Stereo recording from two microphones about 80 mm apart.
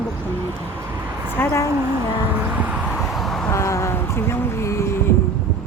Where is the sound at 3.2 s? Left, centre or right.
Centre.